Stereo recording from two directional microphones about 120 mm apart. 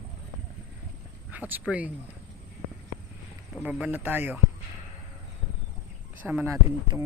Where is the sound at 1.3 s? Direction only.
15° right (ahead or behind).